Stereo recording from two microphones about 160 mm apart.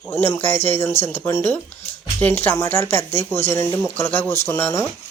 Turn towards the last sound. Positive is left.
turn(degrees=15)  # may be behind; listen again after turning